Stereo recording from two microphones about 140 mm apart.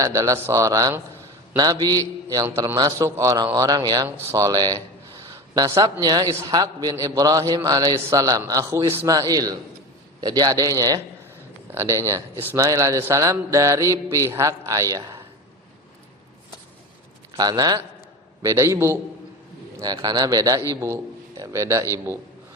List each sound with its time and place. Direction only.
0.0 s a man's voice: 25° right (ahead or behind)
17.3 s a man's voice: 30° right (ahead or behind)
19.8 s a man's voice: 30° right (ahead or behind)